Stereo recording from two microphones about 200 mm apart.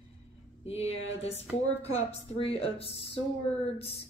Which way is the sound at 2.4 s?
20° right (ahead or behind).